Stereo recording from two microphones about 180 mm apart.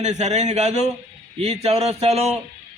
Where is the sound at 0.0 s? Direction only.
40° right (ahead or behind).